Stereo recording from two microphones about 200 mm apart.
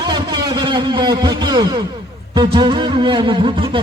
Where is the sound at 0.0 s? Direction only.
20° right (ahead or behind).